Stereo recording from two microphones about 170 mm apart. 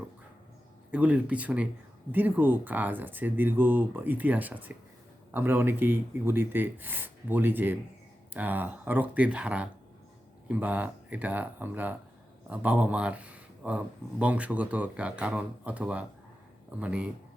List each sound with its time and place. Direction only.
0.9 s speech: 10° right (ahead or behind)